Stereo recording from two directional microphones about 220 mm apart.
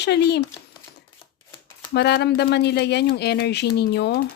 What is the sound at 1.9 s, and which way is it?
Speech, 50° left (ahead or behind).